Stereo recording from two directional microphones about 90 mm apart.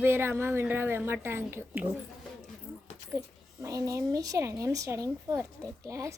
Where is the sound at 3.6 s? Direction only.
35° right (ahead or behind).